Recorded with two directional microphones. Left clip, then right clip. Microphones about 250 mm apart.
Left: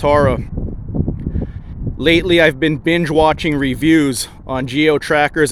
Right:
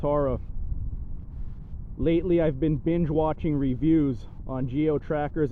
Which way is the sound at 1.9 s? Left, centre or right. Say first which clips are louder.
Left 12 dB; centre.